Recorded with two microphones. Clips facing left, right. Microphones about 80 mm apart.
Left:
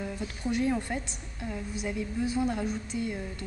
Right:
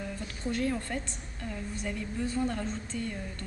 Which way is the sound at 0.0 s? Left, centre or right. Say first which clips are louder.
Left 2 dB; centre.